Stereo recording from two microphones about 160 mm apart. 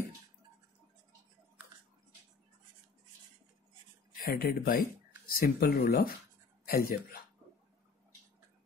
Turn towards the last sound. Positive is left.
turn(degrees=75)  # may be behind; listen again after turning